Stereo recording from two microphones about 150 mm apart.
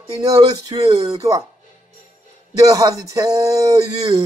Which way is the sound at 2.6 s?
25° right (ahead or behind).